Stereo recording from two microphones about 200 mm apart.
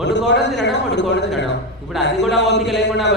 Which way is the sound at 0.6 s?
60° left (ahead or behind).